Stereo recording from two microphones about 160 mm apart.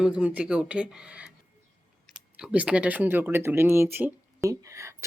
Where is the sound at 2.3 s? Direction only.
5° right (ahead or behind).